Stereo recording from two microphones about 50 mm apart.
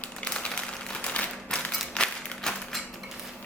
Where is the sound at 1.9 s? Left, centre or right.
Centre.